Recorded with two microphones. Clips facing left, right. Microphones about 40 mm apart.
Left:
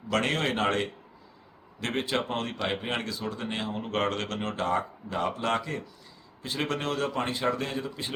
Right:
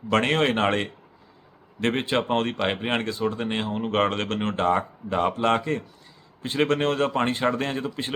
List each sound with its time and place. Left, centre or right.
0.1 s speech: right